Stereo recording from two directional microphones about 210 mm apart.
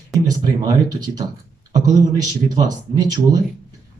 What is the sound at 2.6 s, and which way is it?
Speech, 20° right (ahead or behind).